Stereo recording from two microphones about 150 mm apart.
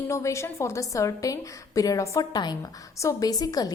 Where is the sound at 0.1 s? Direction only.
20° left (ahead or behind).